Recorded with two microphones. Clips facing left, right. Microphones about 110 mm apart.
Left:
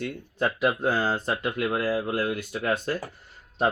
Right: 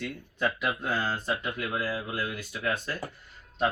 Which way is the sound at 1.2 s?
60° left (ahead or behind).